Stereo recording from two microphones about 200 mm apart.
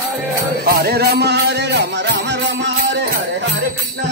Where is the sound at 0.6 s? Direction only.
50° right (ahead or behind).